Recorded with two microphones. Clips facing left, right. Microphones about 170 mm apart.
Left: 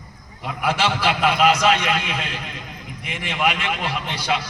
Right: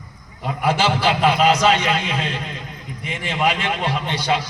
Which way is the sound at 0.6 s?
35° right (ahead or behind).